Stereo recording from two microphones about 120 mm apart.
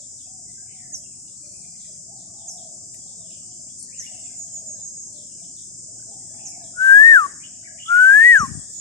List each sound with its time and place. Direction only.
6.7 s whistling: 30° left (ahead or behind)